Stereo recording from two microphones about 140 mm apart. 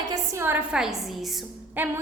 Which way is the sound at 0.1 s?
15° right (ahead or behind).